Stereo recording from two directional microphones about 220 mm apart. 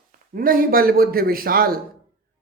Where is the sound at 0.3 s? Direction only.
40° right (ahead or behind).